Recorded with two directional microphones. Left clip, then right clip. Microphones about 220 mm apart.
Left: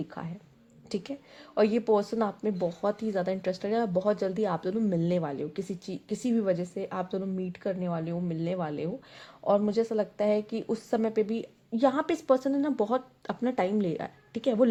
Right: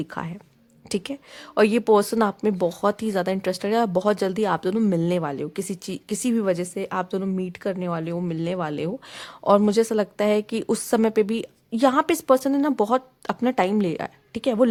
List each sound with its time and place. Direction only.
0.1 s speech: 35° right (ahead or behind)
4.9 s speech: 25° right (ahead or behind)